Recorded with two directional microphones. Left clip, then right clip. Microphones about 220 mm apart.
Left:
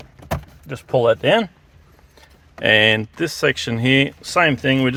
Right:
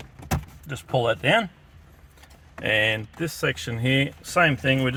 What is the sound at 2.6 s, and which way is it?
Speech, 45° left (ahead or behind).